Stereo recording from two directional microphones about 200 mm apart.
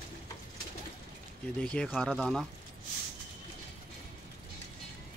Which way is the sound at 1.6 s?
5° left (ahead or behind).